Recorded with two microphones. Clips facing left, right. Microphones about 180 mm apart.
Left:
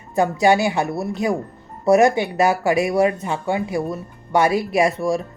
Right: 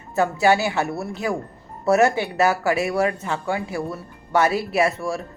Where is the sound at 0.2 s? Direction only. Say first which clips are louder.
Left 2 dB; 15° left (ahead or behind).